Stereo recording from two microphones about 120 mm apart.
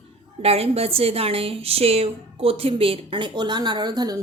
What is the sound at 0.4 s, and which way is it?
A woman's voice, 55° right (ahead or behind).